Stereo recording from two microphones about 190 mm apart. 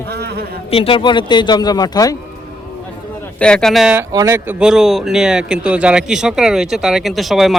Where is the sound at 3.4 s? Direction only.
5° left (ahead or behind).